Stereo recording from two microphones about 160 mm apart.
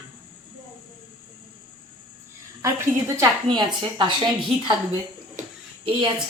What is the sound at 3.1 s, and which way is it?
A woman's voice, 25° right (ahead or behind).